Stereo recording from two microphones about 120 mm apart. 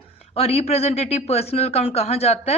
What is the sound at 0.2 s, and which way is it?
Speech, 55° left (ahead or behind).